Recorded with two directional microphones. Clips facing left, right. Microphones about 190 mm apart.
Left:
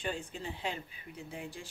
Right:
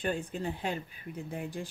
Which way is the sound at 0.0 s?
55° right (ahead or behind).